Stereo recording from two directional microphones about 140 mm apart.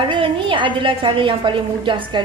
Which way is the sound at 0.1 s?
35° right (ahead or behind).